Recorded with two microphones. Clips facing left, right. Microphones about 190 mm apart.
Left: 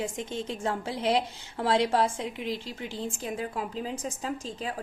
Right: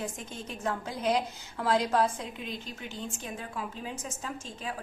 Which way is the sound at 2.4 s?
90° left.